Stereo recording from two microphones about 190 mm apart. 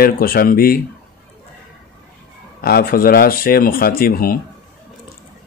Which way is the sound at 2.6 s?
50° left (ahead or behind).